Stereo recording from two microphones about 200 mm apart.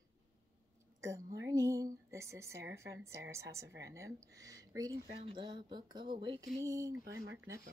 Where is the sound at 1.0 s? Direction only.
15° right (ahead or behind).